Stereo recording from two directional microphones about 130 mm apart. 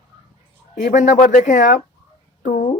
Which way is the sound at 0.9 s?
70° left (ahead or behind).